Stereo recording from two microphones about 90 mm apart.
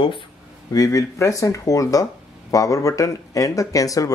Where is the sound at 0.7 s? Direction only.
40° left (ahead or behind).